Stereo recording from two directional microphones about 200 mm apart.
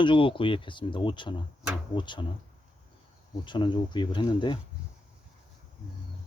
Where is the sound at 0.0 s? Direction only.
25° left (ahead or behind).